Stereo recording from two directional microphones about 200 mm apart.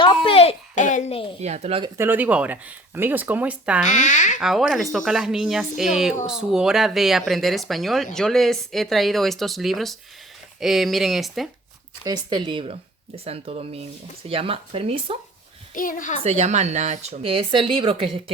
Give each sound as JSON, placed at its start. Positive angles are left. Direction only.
{"t": 0.0, "sound": "a sound", "side_deg": 25}
{"t": 1.4, "sound": "speech", "side_deg": -35}
{"t": 1.8, "sound": "speech", "side_deg": -10}
{"t": 3.8, "sound": "speech", "side_deg": 35}
{"t": 4.4, "sound": "speech", "side_deg": 0}
{"t": 12.0, "sound": "speech", "side_deg": -20}
{"t": 15.7, "sound": "speech", "side_deg": 40}
{"t": 16.2, "sound": "speech", "side_deg": -35}